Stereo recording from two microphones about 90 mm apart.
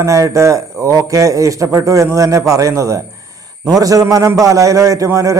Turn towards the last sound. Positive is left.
turn(degrees=-35)  # may be behind; listen again after turning